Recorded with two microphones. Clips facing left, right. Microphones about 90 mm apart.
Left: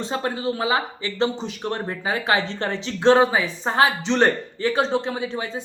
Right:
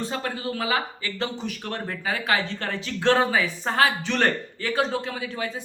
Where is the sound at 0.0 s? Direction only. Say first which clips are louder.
Left 4 dB; 25° left (ahead or behind).